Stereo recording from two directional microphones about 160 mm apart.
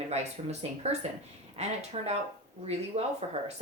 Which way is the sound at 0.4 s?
40° right (ahead or behind).